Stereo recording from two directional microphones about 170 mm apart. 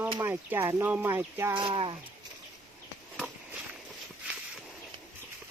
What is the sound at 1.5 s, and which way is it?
Speech, 30° right (ahead or behind).